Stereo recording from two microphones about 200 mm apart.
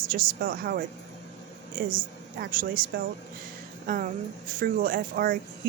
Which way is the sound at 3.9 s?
40° right (ahead or behind).